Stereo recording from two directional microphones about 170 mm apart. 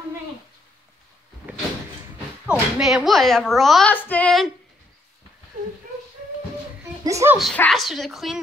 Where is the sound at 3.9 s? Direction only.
10° left (ahead or behind).